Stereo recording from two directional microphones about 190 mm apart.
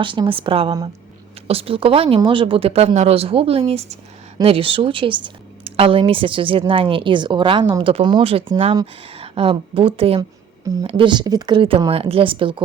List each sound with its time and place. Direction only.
0.0 s speech: 25° right (ahead or behind)